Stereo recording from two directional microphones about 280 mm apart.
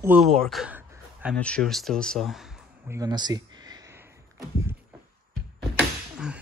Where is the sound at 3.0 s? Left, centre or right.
Centre.